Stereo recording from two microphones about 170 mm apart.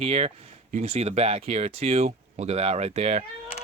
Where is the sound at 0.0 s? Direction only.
35° right (ahead or behind).